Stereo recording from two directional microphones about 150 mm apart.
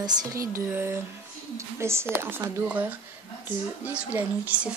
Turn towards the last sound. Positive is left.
turn(degrees=-10)  # may be behind; listen again after turning